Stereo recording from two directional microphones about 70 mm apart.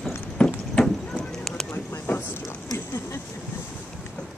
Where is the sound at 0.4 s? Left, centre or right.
Centre.